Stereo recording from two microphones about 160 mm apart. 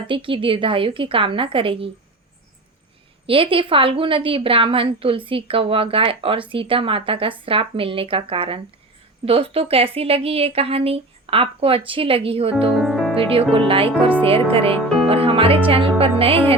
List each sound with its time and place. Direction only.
0.1 s a woman's voice: 30° right (ahead or behind)
3.2 s a woman's voice: 35° right (ahead or behind)
12.7 s music: centre (ahead or behind)
13.5 s a woman's voice: 35° right (ahead or behind)